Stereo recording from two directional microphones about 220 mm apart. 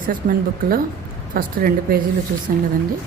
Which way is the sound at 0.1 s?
40° right (ahead or behind).